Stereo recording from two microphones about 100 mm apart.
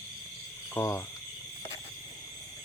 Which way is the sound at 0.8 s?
25° left (ahead or behind).